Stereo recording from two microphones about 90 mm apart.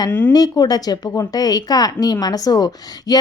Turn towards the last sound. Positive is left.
turn(degrees=50)  # may be behind; listen again after turning